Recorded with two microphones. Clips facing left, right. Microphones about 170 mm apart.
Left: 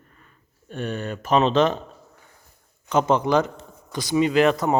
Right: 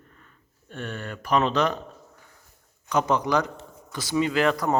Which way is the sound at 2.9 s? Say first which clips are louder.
Left 4 dB; 25° left (ahead or behind).